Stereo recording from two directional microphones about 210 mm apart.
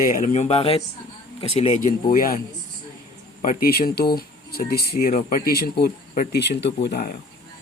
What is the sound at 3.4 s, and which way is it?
Speech, 45° left (ahead or behind).